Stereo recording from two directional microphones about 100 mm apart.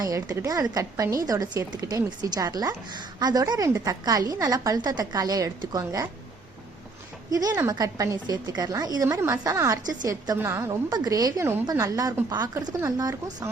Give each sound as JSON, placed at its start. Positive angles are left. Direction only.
{"t": 0.0, "sound": "a woman's voice", "side_deg": -35}
{"t": 7.3, "sound": "a woman's voice", "side_deg": -40}
{"t": 9.0, "sound": "a woman's voice", "side_deg": -30}
{"t": 10.4, "sound": "a woman's voice", "side_deg": -30}